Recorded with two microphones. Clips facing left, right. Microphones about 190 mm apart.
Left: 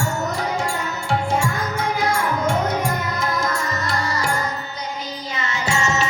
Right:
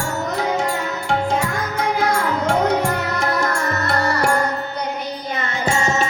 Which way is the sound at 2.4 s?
70° right (ahead or behind).